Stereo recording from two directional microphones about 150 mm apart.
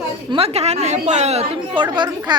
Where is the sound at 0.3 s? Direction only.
40° right (ahead or behind).